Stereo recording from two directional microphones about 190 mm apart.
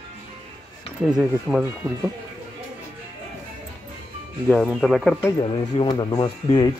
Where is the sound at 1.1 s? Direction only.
Centre (ahead or behind).